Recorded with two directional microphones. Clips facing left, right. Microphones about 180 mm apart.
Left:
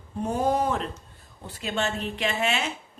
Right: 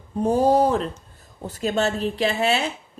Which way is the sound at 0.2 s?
35° right (ahead or behind).